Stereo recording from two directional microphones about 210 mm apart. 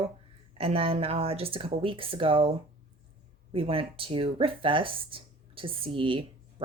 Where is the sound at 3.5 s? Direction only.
25° right (ahead or behind).